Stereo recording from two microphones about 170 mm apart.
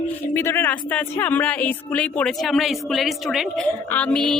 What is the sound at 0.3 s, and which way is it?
Speech, 15° left (ahead or behind).